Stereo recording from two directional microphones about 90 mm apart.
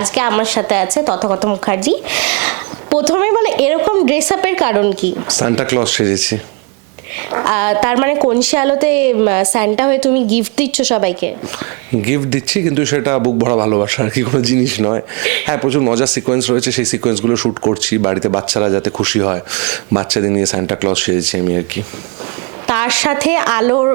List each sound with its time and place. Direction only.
0.0 s a woman's voice: 15° right (ahead or behind)
7.3 s a woman's voice: 15° right (ahead or behind)
22.6 s a woman's voice: 15° right (ahead or behind)